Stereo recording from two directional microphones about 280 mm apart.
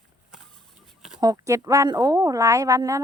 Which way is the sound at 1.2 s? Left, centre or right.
Centre.